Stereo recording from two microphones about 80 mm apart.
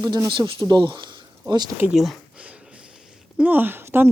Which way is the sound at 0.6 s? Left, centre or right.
Right.